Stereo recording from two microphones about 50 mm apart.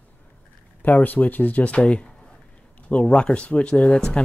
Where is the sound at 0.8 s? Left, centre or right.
Left.